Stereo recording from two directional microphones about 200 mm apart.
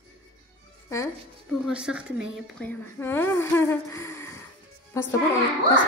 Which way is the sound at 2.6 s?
10° left (ahead or behind).